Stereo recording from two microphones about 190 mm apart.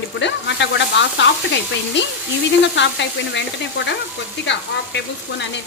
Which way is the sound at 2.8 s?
65° left (ahead or behind).